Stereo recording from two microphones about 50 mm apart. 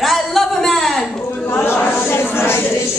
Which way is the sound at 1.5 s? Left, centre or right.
Left.